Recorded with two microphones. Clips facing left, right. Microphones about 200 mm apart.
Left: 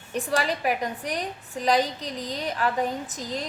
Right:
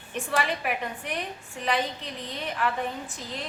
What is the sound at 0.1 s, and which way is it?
A woman's voice, 40° left (ahead or behind).